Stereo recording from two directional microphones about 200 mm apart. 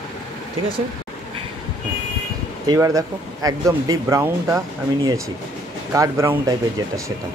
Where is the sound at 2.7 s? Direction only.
15° right (ahead or behind).